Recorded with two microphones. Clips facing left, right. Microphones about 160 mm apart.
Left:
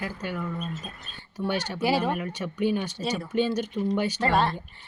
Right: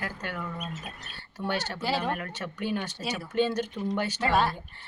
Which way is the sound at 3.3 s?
10° left (ahead or behind).